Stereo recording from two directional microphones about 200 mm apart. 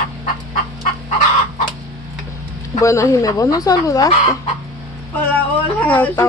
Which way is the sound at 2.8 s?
15° left (ahead or behind).